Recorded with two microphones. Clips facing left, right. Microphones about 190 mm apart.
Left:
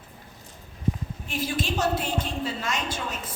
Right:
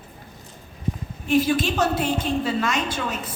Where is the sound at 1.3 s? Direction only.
65° right (ahead or behind).